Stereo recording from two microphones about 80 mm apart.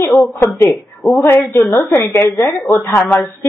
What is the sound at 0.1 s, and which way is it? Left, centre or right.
Speech, centre.